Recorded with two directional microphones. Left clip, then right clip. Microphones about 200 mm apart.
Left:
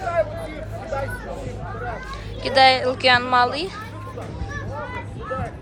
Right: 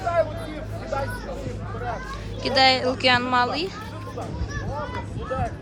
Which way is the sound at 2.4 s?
5° right (ahead or behind).